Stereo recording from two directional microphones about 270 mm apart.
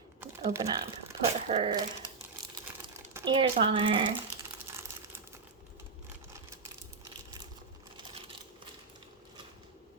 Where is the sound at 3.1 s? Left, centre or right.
Centre.